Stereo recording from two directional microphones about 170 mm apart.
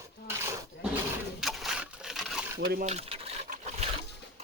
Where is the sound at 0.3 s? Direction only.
15° right (ahead or behind).